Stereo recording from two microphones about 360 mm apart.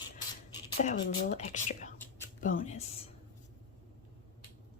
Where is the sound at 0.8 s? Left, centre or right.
Centre.